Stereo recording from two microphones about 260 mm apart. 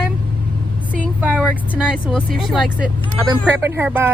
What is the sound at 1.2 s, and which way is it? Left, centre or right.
Speech, centre.